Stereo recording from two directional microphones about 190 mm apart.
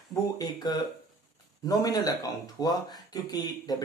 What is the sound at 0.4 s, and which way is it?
Speech, 20° left (ahead or behind).